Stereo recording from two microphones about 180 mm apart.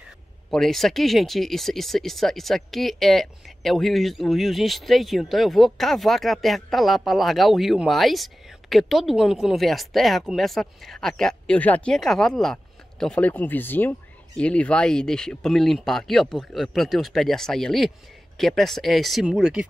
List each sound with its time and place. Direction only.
0.5 s speech: centre (ahead or behind)